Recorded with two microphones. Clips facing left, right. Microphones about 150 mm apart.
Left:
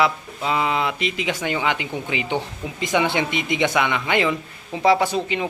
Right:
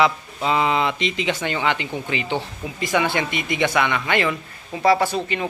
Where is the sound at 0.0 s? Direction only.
5° left (ahead or behind).